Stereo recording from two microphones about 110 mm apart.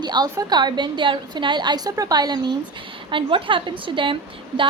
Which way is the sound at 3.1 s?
50° right (ahead or behind).